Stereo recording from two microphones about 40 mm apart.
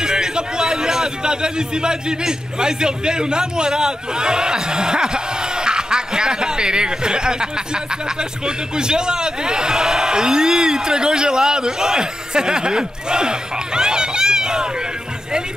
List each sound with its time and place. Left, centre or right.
0.0 s a man's voice: centre